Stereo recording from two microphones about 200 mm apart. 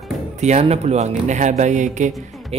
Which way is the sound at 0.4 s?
35° right (ahead or behind).